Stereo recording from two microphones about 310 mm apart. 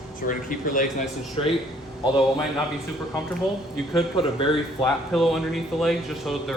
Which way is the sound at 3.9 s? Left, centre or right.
Centre.